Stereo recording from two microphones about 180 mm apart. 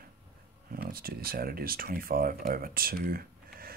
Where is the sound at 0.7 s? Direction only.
55° right (ahead or behind).